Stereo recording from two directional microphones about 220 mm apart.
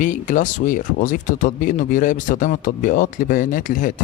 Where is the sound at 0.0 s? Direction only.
35° left (ahead or behind).